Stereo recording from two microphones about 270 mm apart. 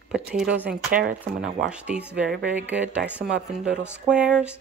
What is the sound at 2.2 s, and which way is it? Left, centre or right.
Speech, right.